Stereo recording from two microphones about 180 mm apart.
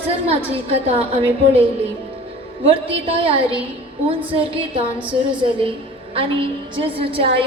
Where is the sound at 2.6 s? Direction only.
30° right (ahead or behind).